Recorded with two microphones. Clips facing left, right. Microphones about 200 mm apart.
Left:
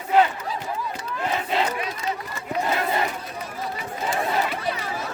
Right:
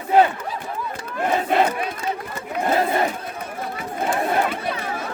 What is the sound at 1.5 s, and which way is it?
Crowd, 55° right (ahead or behind).